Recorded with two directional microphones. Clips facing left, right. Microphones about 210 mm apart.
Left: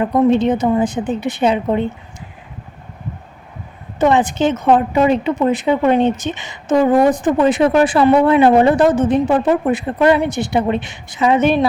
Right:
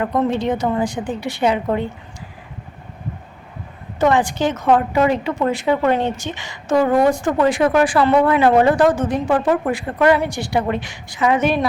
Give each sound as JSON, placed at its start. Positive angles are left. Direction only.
{"t": 0.0, "sound": "speech", "side_deg": 20}
{"t": 4.0, "sound": "speech", "side_deg": 20}